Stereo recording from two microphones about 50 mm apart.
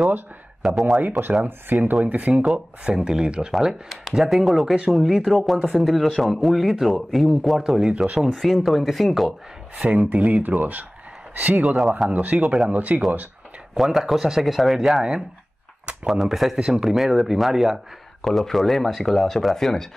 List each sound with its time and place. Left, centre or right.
0.6 s speech: centre
1.7 s speech: right
2.9 s speech: centre
3.5 s speech: centre
9.8 s speech: right
13.7 s speech: centre
15.8 s a sound: right
16.1 s speech: centre
16.5 s speech: centre
16.8 s speech: centre